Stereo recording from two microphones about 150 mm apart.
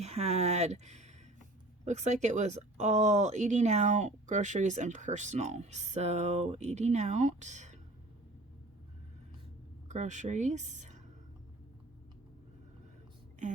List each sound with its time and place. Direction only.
0.0 s speech: 45° right (ahead or behind)
9.9 s speech: 55° right (ahead or behind)